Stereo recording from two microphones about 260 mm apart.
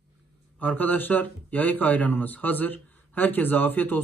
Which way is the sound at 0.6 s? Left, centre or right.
Centre.